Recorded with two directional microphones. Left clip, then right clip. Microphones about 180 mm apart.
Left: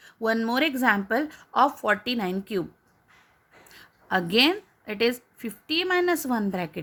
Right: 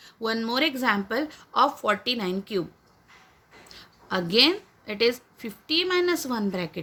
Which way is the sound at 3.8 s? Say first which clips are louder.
Left 3 dB; 55° left (ahead or behind).